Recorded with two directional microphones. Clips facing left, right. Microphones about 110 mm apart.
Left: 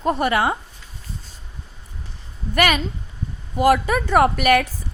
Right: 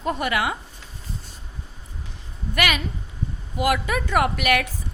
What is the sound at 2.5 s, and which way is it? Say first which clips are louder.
A woman's voice: left 5 dB; 40° left (ahead or behind).